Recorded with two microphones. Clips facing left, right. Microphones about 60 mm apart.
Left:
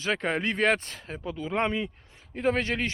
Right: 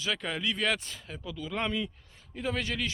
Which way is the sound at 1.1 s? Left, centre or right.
Left.